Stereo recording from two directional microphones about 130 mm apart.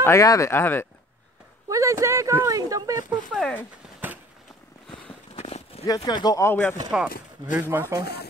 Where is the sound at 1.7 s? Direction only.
25° right (ahead or behind).